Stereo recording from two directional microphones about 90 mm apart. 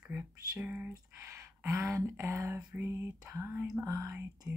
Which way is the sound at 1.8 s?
30° right (ahead or behind).